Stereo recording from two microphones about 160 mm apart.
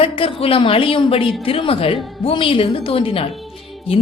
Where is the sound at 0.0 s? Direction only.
35° left (ahead or behind).